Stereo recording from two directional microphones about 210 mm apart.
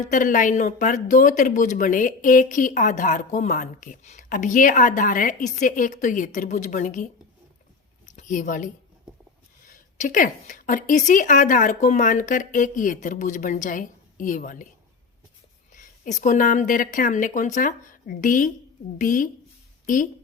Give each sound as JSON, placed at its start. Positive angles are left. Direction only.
{"t": 0.1, "sound": "speech", "side_deg": 40}
{"t": 8.0, "sound": "a sound", "side_deg": 35}
{"t": 9.6, "sound": "speech", "side_deg": 40}
{"t": 15.7, "sound": "speech", "side_deg": 35}